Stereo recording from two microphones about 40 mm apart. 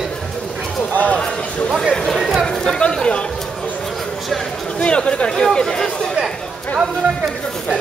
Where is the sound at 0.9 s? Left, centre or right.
Left.